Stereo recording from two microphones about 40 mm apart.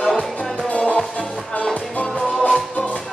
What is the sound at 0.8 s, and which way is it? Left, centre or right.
Music, left.